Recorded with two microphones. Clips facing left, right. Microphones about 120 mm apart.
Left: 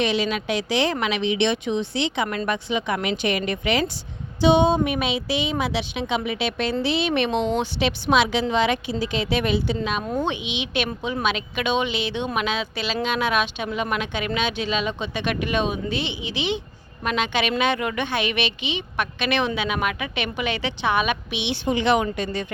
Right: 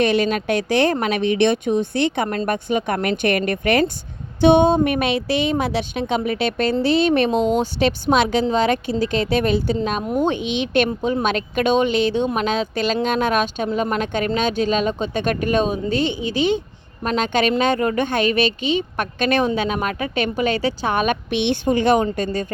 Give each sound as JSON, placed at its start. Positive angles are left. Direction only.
{"t": 0.0, "sound": "speech", "side_deg": -50}
{"t": 10.0, "sound": "speech", "side_deg": -20}
{"t": 10.2, "sound": "speech", "side_deg": -50}